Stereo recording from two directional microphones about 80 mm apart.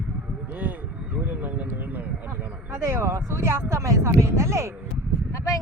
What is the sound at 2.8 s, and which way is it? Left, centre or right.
Speech, right.